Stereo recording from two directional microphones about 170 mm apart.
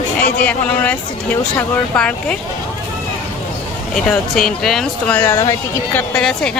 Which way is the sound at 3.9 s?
Centre (ahead or behind).